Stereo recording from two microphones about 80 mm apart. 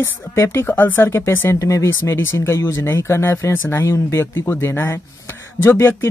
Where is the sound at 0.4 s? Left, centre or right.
Left.